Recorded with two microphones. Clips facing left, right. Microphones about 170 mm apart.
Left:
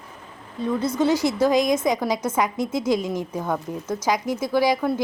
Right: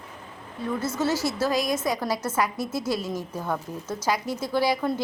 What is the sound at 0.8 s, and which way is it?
A woman's voice, 15° left (ahead or behind).